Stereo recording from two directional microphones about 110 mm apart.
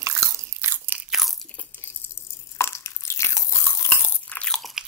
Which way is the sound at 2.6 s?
25° left (ahead or behind).